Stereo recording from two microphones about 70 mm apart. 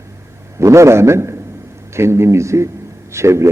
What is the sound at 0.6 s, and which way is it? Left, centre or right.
A man's voice, right.